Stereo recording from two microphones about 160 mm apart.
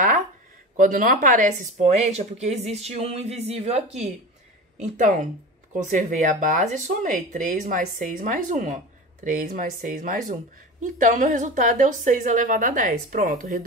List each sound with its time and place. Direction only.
0.7 s speech: 55° right (ahead or behind)